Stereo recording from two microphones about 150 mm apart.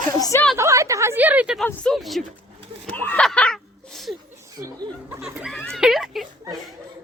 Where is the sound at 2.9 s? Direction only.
10° left (ahead or behind).